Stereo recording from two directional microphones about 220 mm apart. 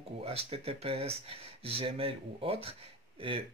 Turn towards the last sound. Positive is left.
turn(degrees=-25)  # may be behind; listen again after turning